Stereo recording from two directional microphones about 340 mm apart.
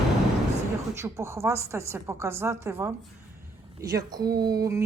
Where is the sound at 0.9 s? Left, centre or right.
Centre.